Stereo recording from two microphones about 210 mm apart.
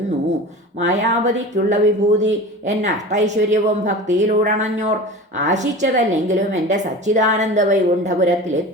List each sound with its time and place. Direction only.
0.9 s a woman's voice: 35° right (ahead or behind)